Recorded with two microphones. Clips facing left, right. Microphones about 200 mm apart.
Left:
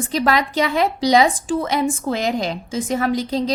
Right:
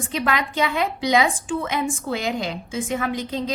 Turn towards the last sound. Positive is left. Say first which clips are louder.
# left 5 dB
turn(degrees=35)  # may be behind; listen again after turning